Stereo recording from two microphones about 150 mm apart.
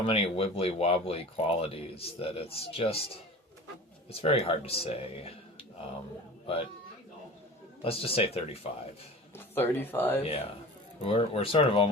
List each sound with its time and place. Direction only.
0.1 s speech: 40° left (ahead or behind)
4.1 s speech: 40° left (ahead or behind)
7.8 s speech: 40° left (ahead or behind)
9.3 s speech: 15° left (ahead or behind)
10.2 s speech: 40° left (ahead or behind)